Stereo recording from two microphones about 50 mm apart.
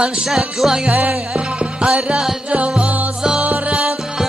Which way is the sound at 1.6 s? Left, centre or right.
Centre.